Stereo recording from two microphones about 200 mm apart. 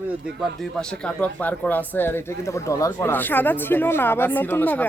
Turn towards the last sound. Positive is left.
turn(degrees=10)  # may be behind; listen again after turning